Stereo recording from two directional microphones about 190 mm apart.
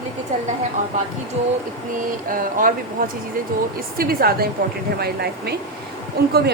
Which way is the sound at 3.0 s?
50° right (ahead or behind).